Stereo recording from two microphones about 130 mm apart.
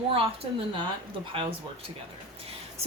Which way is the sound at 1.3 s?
45° right (ahead or behind).